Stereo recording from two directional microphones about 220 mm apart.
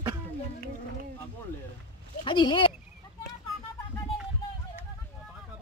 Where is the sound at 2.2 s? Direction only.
20° left (ahead or behind).